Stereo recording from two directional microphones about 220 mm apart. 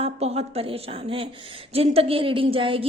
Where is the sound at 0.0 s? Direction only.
30° right (ahead or behind).